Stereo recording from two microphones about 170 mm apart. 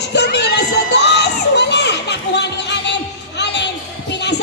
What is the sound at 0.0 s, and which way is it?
Children shouting, 90° left.